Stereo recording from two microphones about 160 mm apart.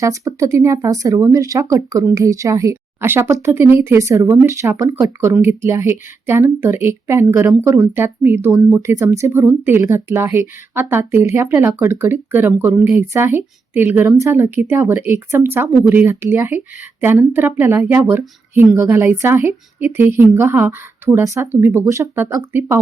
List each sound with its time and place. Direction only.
0.0 s speech: 20° right (ahead or behind)